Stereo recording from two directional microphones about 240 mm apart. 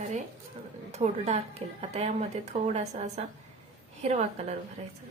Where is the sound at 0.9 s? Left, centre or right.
Right.